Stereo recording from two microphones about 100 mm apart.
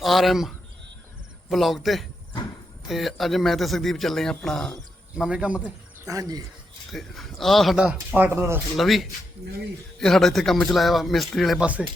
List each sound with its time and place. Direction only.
0.0 s a man's voice: centre (ahead or behind)
5.1 s speech: 10° right (ahead or behind)
6.1 s speech: 35° right (ahead or behind)
6.9 s a man's voice: centre (ahead or behind)
8.1 s speech: 20° right (ahead or behind)
8.7 s a man's voice: centre (ahead or behind)
11.6 s speech: 15° right (ahead or behind)